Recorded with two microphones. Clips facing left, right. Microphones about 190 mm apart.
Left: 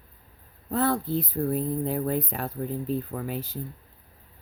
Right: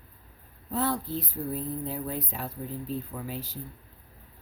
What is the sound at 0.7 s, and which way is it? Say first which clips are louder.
Speech: left 4 dB; 55° left (ahead or behind).